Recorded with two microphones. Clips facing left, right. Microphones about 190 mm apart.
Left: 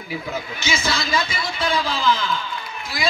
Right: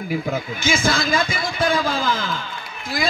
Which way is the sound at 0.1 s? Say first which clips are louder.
Right 4 dB; 50° right (ahead or behind).